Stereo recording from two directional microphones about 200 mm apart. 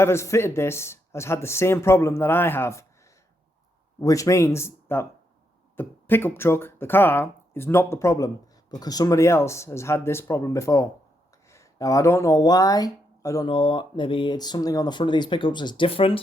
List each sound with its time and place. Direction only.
0.0 s speech: 15° left (ahead or behind)
4.0 s speech: 15° left (ahead or behind)